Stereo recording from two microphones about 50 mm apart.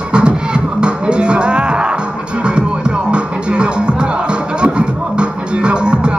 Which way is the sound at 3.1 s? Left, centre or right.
Centre.